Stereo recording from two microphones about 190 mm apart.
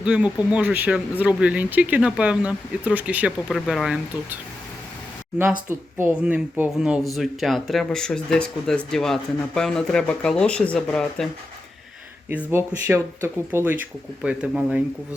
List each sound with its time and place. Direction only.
0.0 s speech: 5° right (ahead or behind)
5.4 s speech: 10° right (ahead or behind)
12.3 s speech: 10° right (ahead or behind)